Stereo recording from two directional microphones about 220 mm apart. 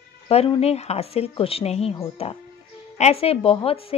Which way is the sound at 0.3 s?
25° left (ahead or behind).